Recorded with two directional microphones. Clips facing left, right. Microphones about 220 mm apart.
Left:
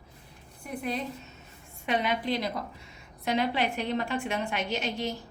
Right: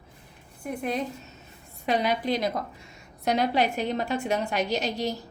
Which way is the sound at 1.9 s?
40° right (ahead or behind).